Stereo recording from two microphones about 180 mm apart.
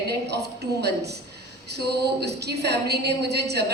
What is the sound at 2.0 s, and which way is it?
A woman's voice, 65° right (ahead or behind).